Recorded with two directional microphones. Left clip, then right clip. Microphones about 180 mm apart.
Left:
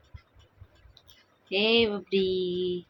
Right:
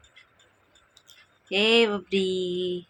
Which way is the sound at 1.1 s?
10° right (ahead or behind).